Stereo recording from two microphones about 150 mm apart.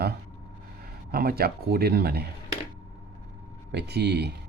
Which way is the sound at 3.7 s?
90° right.